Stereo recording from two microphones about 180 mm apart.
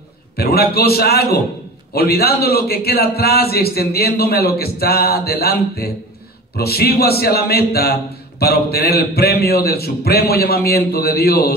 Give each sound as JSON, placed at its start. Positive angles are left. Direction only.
{"t": 0.4, "sound": "a man's voice", "side_deg": 60}